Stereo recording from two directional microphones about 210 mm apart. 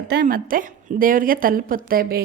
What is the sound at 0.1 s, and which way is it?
A woman's voice, 45° right (ahead or behind).